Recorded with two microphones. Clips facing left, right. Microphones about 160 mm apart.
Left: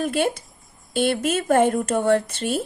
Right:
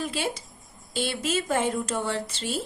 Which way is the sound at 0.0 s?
55° left (ahead or behind).